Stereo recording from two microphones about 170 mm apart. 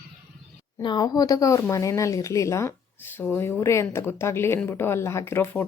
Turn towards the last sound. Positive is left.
turn(degrees=15)  # may be behind; listen again after turning